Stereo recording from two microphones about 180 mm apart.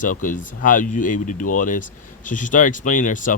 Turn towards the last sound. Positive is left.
turn(degrees=45)  # may be behind; listen again after turning